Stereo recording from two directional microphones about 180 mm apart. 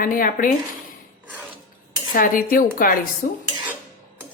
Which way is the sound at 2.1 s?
50° left (ahead or behind).